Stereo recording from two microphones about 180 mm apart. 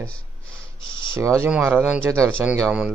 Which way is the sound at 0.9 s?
25° left (ahead or behind).